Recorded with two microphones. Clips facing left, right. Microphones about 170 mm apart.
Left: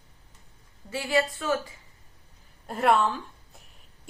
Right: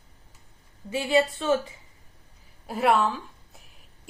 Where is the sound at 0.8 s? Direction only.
25° right (ahead or behind).